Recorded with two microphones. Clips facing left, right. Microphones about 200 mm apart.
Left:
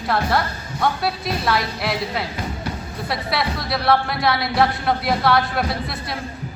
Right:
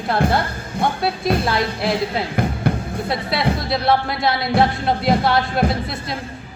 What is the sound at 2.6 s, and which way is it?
Music, 55° right (ahead or behind).